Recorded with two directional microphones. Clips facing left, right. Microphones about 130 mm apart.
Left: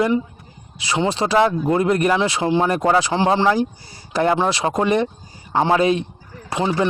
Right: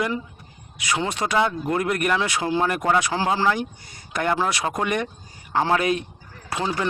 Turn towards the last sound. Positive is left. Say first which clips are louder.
# left 5 dB
turn(degrees=25)  # may be behind; listen again after turning